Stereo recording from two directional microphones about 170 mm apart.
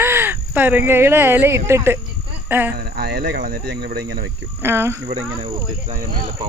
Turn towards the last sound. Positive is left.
turn(degrees=-45)  # may be behind; listen again after turning